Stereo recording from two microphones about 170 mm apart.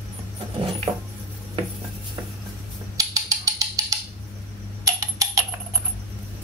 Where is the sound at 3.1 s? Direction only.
20° right (ahead or behind).